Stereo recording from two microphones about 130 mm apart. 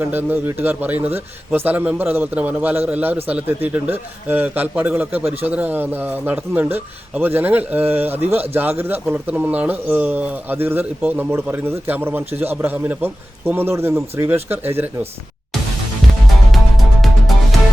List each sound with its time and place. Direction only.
0.0 s a man's voice: 15° right (ahead or behind)
16.5 s music: centre (ahead or behind)